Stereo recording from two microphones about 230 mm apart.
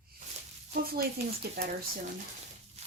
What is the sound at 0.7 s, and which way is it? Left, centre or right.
Speech, right.